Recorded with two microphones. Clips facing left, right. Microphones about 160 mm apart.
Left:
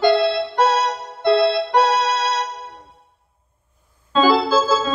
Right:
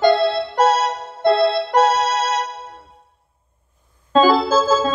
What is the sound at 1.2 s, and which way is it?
Keyboard, 45° right (ahead or behind).